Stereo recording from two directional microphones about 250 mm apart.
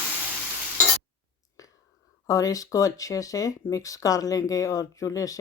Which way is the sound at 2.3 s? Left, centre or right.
Centre.